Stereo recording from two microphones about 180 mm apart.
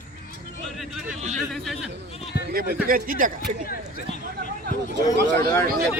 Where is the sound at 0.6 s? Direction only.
Centre (ahead or behind).